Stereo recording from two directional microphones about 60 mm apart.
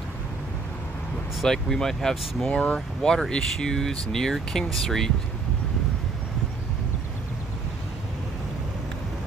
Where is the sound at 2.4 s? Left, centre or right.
Centre.